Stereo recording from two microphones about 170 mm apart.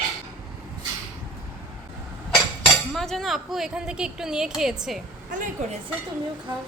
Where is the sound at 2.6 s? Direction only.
5° left (ahead or behind).